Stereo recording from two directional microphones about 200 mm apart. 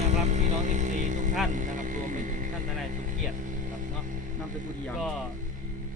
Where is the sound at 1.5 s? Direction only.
40° right (ahead or behind).